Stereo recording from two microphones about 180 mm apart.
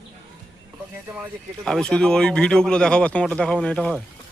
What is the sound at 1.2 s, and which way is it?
Speech, 5° left (ahead or behind).